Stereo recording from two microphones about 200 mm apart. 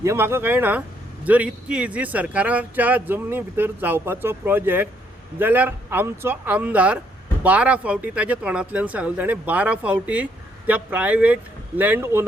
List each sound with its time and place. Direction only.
0.0 s speech: 15° right (ahead or behind)